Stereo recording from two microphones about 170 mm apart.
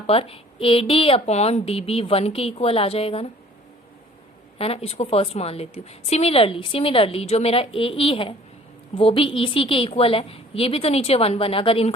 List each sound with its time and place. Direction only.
0.1 s a woman's voice: 35° left (ahead or behind)
4.5 s a woman's voice: 35° left (ahead or behind)